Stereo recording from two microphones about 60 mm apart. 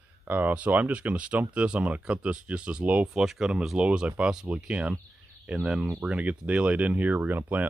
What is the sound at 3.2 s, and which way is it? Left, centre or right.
Speech, centre.